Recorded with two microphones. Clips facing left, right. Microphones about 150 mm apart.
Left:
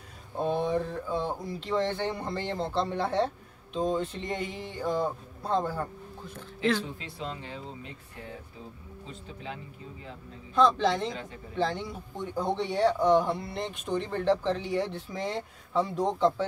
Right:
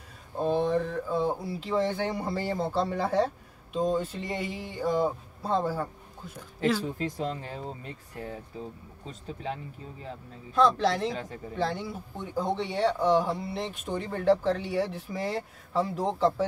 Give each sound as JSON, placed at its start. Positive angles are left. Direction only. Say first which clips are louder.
{"t": 0.4, "sound": "speech", "louder": "right 2 dB", "side_deg": 0}
{"t": 7.0, "sound": "speech", "louder": "right 6 dB", "side_deg": -45}
{"t": 9.0, "sound": "speech", "louder": "right 5 dB", "side_deg": -40}
{"t": 10.5, "sound": "speech", "louder": "even", "side_deg": -5}